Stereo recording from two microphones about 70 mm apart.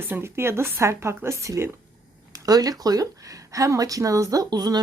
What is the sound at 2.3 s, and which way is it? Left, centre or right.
Speech, right.